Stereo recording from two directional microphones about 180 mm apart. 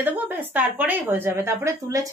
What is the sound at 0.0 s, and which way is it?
A woman's voice, 10° right (ahead or behind).